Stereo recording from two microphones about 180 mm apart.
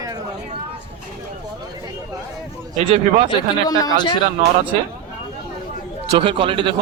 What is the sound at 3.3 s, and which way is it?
Speech, 20° left (ahead or behind).